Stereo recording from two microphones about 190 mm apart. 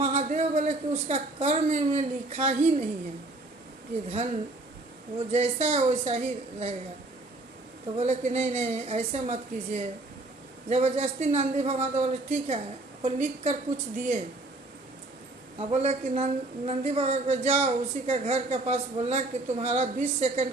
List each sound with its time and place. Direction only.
0.0 s a man's voice: 35° right (ahead or behind)
4.1 s a woman's voice: 35° right (ahead or behind)
7.9 s a woman's voice: 35° right (ahead or behind)
15.5 s a woman's voice: 35° right (ahead or behind)